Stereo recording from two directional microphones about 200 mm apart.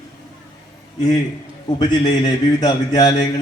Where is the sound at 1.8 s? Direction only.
20° left (ahead or behind).